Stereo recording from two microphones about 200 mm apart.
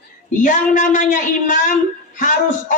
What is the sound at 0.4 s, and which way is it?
A man's voice, 40° left (ahead or behind).